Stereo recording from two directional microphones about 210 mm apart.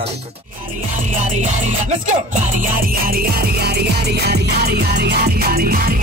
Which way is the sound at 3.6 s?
50° right (ahead or behind).